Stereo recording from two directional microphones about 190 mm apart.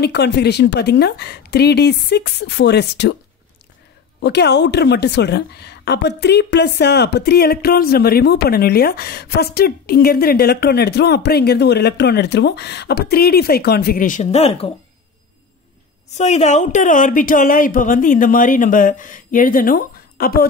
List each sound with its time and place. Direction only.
0.0 s a woman's voice: 60° left (ahead or behind)
4.2 s a woman's voice: 60° left (ahead or behind); by 14.7 s 30° left (ahead or behind)
16.2 s a woman's voice: 35° left (ahead or behind)